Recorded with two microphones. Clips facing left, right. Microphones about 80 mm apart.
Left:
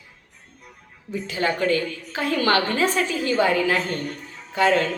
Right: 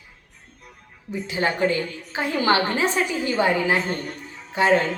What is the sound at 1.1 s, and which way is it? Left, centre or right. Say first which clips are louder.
Speech: even; centre.